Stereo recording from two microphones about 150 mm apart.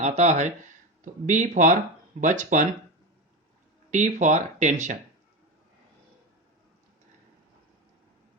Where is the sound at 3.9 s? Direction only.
55° right (ahead or behind).